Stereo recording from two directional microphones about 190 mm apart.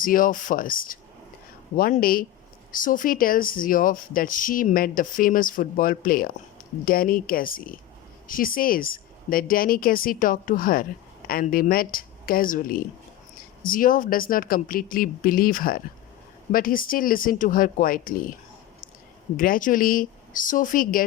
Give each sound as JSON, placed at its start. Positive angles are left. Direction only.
{"t": 0.0, "sound": "speech", "side_deg": 45}
{"t": 19.4, "sound": "speech", "side_deg": 45}